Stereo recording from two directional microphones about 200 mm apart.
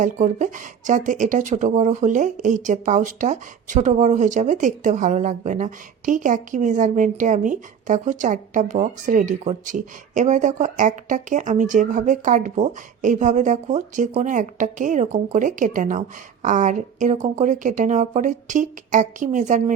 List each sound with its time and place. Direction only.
0.0 s speech: 40° right (ahead or behind)